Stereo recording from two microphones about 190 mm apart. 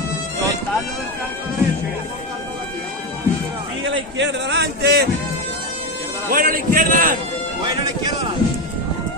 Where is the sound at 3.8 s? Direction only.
70° right (ahead or behind).